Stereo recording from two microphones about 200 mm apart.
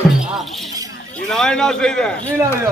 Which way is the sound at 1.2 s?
5° left (ahead or behind).